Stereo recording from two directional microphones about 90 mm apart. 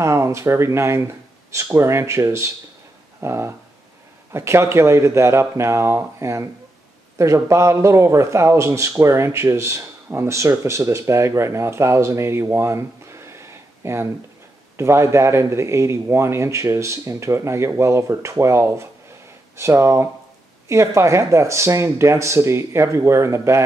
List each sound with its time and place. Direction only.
0.0 s speech: 35° right (ahead or behind)
3.2 s a sound: 30° right (ahead or behind)
4.3 s speech: 30° right (ahead or behind)